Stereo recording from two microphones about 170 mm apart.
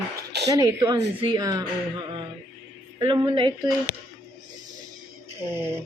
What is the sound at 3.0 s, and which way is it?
Speech, 30° right (ahead or behind).